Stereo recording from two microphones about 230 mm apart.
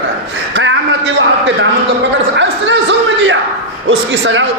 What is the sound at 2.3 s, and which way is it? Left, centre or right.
A man's voice, right.